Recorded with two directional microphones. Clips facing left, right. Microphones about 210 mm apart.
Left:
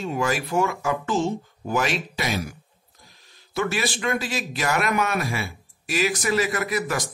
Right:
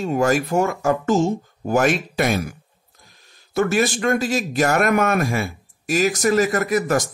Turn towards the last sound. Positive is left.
turn(degrees=-45)  # may be behind; listen again after turning